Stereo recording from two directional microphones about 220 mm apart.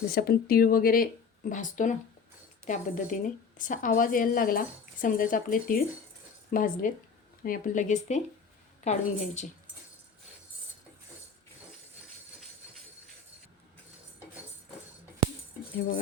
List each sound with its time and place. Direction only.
0.1 s a woman's voice: 45° left (ahead or behind)